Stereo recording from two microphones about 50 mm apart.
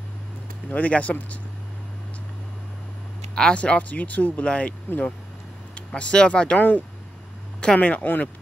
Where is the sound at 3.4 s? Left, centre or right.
Centre; by 5.1 s left.